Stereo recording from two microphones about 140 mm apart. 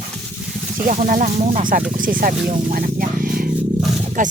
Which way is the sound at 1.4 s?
60° right (ahead or behind).